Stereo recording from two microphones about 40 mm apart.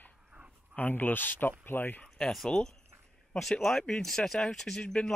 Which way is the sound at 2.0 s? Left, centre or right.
Centre.